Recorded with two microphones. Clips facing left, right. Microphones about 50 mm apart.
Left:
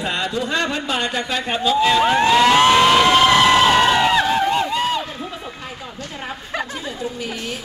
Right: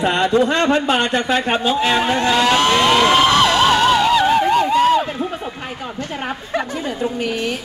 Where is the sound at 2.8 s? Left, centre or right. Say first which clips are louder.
Even; centre.